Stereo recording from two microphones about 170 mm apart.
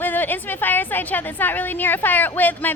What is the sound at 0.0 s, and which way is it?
A woman's voice, 10° left (ahead or behind).